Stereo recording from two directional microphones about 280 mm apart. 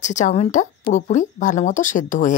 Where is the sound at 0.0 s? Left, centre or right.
Left.